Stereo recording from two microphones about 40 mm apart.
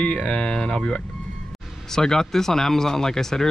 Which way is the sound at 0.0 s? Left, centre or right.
Left.